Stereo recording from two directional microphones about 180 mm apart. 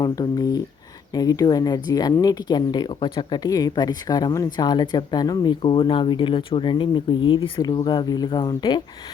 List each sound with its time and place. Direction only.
0.0 s speech: 20° left (ahead or behind)